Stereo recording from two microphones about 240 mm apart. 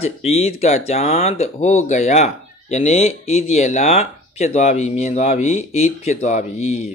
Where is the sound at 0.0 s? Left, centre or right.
Left.